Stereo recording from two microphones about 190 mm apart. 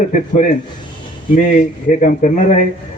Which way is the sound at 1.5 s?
40° left (ahead or behind).